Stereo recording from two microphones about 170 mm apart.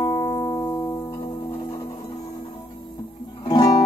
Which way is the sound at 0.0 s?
20° left (ahead or behind).